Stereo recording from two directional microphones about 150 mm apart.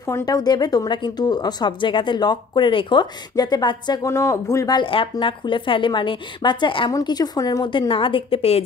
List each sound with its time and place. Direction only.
0.0 s a woman's voice: 20° left (ahead or behind); by 8.6 s 40° left (ahead or behind)